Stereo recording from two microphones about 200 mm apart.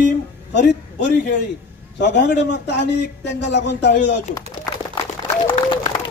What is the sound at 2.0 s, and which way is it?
Speech, 60° left (ahead or behind).